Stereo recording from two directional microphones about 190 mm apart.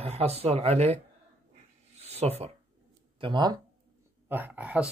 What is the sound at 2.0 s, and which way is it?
Speech, 35° right (ahead or behind).